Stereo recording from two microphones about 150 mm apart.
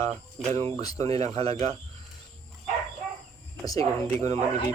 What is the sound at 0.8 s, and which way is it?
Speech, 25° left (ahead or behind).